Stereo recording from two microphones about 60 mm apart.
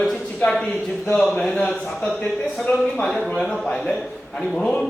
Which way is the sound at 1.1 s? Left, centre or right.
Centre.